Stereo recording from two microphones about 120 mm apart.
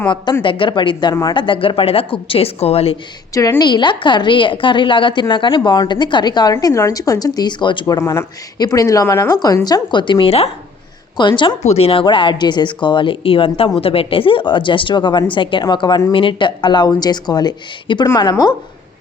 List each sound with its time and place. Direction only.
0.4 s speech: 45° left (ahead or behind)
3.6 s a woman's voice: 40° left (ahead or behind)
7.9 s a woman's voice: 25° left (ahead or behind); by 10.5 s 55° left (ahead or behind)
11.2 s a woman's voice: 40° left (ahead or behind)
11.6 s a woman's voice: 60° left (ahead or behind); by 18.5 s 35° left (ahead or behind)